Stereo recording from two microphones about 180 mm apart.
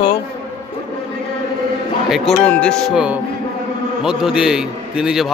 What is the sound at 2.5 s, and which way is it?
A man's voice, 5° left (ahead or behind).